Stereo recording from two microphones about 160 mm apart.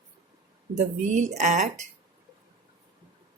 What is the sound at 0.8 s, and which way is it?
Speech, 45° right (ahead or behind).